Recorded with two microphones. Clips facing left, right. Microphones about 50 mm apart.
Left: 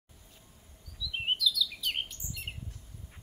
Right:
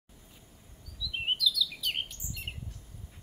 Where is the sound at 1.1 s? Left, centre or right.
Centre.